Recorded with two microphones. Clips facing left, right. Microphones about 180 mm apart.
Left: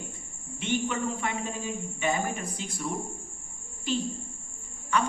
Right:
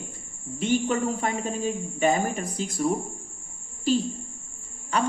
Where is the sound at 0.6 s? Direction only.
40° right (ahead or behind).